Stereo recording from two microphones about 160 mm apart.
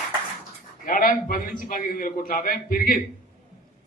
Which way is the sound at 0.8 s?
60° left (ahead or behind).